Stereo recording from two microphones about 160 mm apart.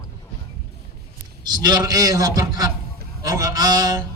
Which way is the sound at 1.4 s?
25° right (ahead or behind).